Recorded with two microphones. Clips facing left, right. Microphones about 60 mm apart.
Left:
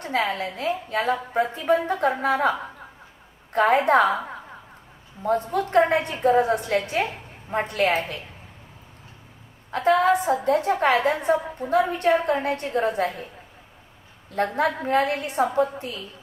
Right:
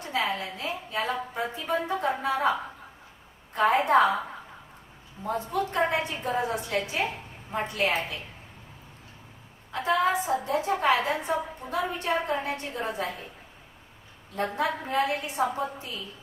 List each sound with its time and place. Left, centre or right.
0.0 s a woman's voice: left
5.2 s a woman's voice: left
9.7 s a woman's voice: left
14.3 s a woman's voice: left